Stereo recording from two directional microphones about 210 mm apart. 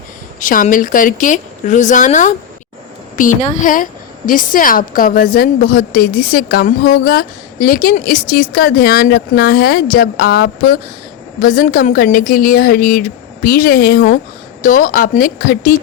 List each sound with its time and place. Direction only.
0.3 s a woman's voice: 40° left (ahead or behind)